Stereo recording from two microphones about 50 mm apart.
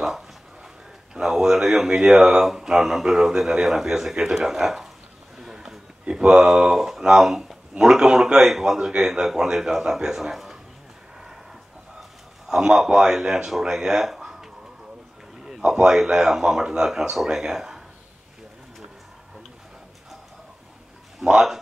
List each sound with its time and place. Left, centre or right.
1.1 s speech: centre
5.4 s a sound: centre
6.0 s speech: centre
6.5 s speech: centre
12.4 s speech: centre
15.4 s a sound: centre
16.0 s speech: centre
21.2 s speech: centre